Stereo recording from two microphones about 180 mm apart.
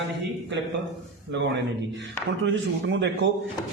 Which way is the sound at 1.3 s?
85° right.